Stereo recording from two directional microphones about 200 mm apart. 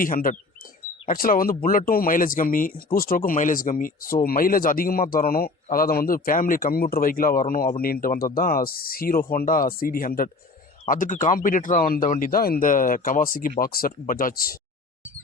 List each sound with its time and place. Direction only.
0.0 s speech: 45° left (ahead or behind)